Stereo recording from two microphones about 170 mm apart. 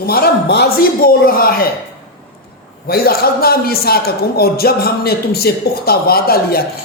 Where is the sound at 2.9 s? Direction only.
65° left (ahead or behind).